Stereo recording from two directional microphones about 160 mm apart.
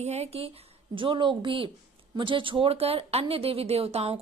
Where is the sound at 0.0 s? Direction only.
40° right (ahead or behind).